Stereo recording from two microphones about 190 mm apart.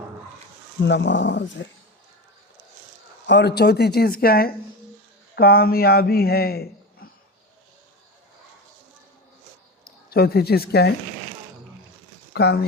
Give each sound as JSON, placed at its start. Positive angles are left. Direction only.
{"t": 0.8, "sound": "speech", "side_deg": 65}
{"t": 3.2, "sound": "a man's voice", "side_deg": 65}
{"t": 9.8, "sound": "speech", "side_deg": 55}
{"t": 12.3, "sound": "speech", "side_deg": 60}